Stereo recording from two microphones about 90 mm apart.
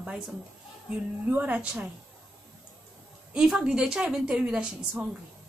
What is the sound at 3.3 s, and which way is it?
A woman's voice, 10° right (ahead or behind).